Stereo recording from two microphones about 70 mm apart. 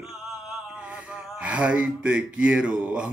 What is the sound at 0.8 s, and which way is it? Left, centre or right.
Gasp, centre.